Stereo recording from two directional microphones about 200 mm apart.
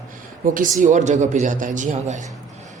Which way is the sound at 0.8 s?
40° right (ahead or behind).